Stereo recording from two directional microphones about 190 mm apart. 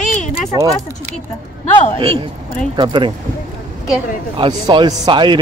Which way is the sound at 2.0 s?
25° right (ahead or behind).